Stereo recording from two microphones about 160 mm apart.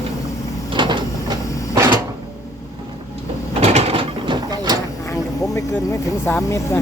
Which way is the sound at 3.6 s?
40° right (ahead or behind).